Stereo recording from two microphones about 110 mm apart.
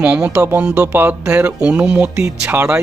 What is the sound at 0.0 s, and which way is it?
Speech, 10° right (ahead or behind).